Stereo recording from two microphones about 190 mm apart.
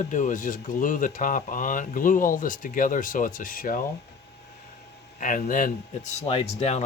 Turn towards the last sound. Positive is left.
turn(degrees=30)  # may be behind; listen again after turning